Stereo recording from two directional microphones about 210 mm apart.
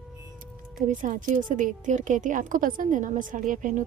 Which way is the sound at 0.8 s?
40° right (ahead or behind).